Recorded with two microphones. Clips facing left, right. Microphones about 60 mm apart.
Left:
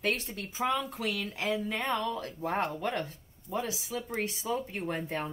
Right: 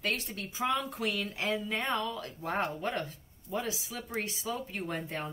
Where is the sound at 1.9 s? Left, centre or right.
Left.